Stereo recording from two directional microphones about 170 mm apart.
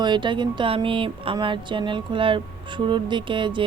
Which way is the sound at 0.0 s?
25° right (ahead or behind).